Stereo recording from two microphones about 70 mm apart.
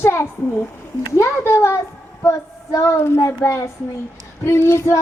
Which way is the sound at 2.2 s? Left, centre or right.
Left.